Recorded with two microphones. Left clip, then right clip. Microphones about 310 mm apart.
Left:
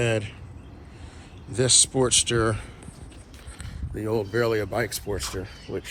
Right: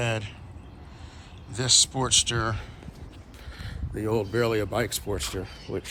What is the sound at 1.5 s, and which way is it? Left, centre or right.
Speech, centre.